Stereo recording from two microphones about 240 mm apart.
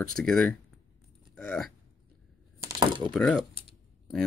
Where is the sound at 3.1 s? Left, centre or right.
Centre.